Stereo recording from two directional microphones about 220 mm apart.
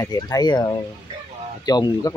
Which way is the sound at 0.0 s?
15° left (ahead or behind).